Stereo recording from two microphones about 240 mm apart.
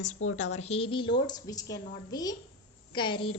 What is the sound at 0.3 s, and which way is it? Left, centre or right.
A woman's voice, left.